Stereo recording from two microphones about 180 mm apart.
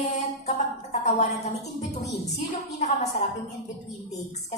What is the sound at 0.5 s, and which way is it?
Music, 35° left (ahead or behind).